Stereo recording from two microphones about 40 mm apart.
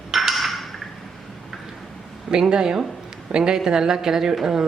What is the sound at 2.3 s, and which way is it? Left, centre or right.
A woman's voice, centre.